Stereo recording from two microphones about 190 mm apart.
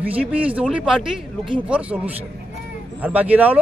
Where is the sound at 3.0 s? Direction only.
10° right (ahead or behind).